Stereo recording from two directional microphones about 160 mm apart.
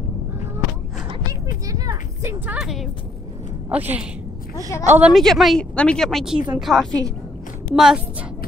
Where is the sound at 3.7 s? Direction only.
10° right (ahead or behind).